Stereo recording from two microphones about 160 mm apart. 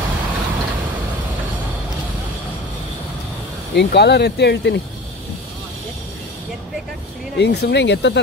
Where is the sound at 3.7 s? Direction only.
90° left.